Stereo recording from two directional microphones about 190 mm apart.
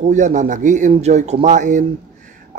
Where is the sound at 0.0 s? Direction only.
40° right (ahead or behind).